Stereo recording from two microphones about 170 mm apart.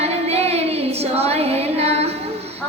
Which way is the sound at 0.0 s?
40° right (ahead or behind).